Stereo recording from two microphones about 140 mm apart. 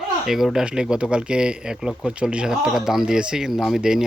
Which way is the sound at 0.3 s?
5° right (ahead or behind).